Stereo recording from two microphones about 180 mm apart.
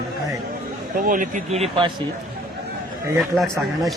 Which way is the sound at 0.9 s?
50° right (ahead or behind).